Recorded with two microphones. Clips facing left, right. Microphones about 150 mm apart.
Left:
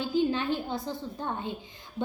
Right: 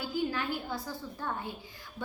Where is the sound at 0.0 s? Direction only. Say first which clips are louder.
Left 6 dB; 25° left (ahead or behind).